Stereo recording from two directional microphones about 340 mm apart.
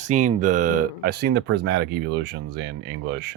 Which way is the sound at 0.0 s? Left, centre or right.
Right.